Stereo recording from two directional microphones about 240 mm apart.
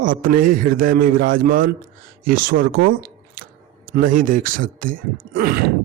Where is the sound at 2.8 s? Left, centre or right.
Right.